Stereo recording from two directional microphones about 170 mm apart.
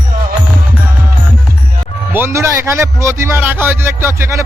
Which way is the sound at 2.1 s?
15° right (ahead or behind).